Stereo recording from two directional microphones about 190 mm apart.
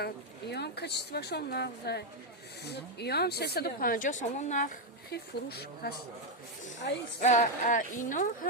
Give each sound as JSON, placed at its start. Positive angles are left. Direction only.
{"t": 0.0, "sound": "a woman's voice", "side_deg": 60}
{"t": 5.1, "sound": "speech", "side_deg": 55}
{"t": 7.2, "sound": "a woman's voice", "side_deg": 40}